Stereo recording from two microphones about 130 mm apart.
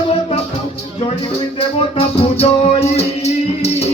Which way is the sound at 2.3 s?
50° left (ahead or behind).